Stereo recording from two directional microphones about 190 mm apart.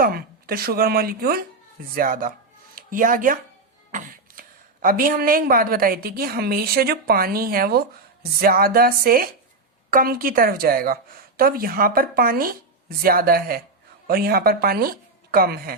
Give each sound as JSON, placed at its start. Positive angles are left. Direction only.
{"t": 0.0, "sound": "speech", "side_deg": -50}